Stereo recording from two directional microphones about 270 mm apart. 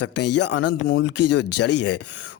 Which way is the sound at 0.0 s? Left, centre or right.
Left.